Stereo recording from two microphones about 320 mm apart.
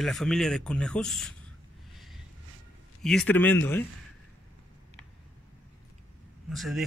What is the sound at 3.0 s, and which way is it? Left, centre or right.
Speech, centre.